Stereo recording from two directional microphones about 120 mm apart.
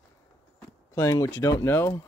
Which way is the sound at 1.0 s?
25° left (ahead or behind).